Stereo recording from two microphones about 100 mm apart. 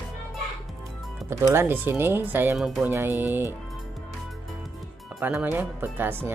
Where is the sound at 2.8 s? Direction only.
20° right (ahead or behind).